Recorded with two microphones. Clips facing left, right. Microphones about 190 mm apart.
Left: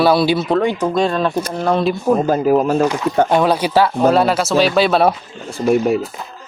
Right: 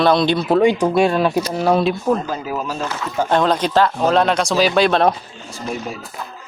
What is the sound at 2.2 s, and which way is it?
Speech, 50° left (ahead or behind).